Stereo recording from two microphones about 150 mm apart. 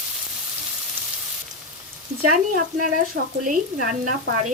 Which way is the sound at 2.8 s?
65° right (ahead or behind).